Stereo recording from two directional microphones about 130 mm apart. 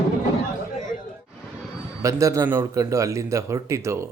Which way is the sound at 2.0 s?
25° right (ahead or behind).